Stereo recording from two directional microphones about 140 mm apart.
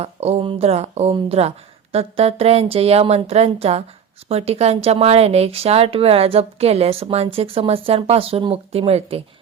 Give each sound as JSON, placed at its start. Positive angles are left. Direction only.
{"t": 0.0, "sound": "speech", "side_deg": -45}